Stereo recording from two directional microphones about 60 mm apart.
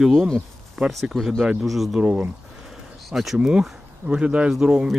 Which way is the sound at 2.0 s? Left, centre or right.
Right.